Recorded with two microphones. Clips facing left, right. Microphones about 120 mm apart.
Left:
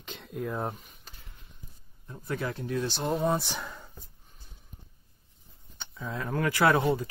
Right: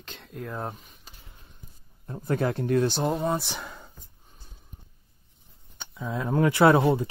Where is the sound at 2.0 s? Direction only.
45° right (ahead or behind).